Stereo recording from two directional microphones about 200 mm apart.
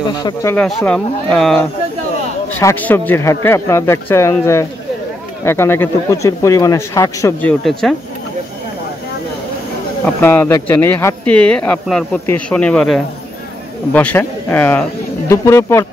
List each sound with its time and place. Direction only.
0.1 s speech: 20° left (ahead or behind)
0.6 s speech: 5° left (ahead or behind)
2.6 s speech: 10° left (ahead or behind)
10.2 s speech: 10° left (ahead or behind)